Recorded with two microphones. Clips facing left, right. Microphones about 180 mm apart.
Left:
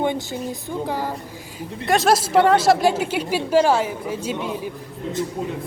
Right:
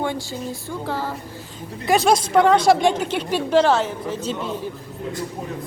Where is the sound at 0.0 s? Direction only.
20° left (ahead or behind).